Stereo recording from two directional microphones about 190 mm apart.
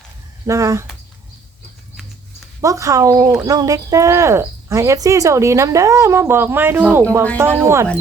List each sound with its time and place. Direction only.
0.4 s speech: 15° right (ahead or behind)
2.6 s speech: 15° right (ahead or behind)